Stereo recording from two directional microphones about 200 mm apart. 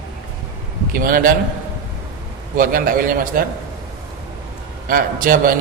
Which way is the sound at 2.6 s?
45° right (ahead or behind).